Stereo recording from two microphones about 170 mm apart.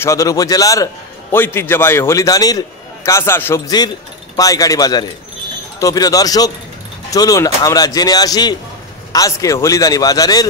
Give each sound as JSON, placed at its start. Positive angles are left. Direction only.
{"t": 0.0, "sound": "a man's voice", "side_deg": 20}